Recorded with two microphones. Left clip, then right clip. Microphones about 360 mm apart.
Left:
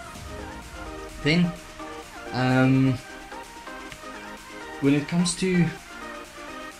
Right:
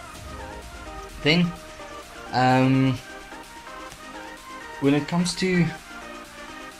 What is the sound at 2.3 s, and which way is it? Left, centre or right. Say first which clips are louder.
Speech: right 5 dB; centre.